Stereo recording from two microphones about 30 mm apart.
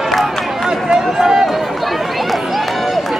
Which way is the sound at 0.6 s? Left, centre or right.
Centre.